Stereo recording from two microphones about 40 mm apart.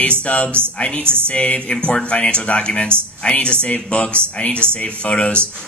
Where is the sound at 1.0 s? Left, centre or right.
Right.